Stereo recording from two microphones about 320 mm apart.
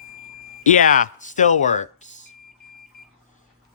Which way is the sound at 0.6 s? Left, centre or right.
Left.